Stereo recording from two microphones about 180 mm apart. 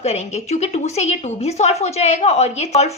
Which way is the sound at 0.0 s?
35° left (ahead or behind).